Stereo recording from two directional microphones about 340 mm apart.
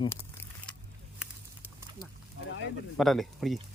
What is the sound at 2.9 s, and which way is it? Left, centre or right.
Speech, centre.